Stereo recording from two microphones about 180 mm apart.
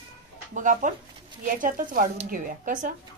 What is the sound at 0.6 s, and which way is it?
A woman's voice, 45° right (ahead or behind).